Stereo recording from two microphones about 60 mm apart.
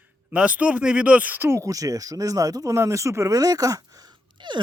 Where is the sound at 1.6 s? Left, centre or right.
Right.